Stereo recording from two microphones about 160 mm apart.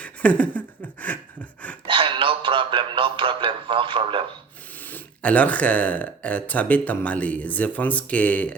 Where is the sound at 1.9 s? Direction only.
30° right (ahead or behind).